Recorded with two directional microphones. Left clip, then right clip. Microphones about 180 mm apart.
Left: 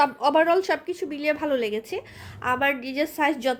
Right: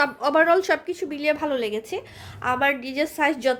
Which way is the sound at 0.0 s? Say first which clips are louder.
Even; centre (ahead or behind).